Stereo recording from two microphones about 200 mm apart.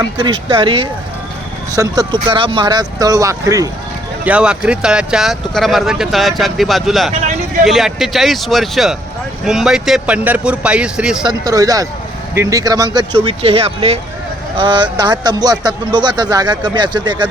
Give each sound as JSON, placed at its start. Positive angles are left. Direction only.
{"t": 0.0, "sound": "speech", "side_deg": -20}
{"t": 4.3, "sound": "speech", "side_deg": -5}
{"t": 11.3, "sound": "speech", "side_deg": -20}